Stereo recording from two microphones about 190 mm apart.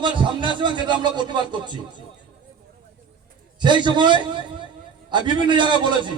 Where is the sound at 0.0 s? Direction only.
25° right (ahead or behind).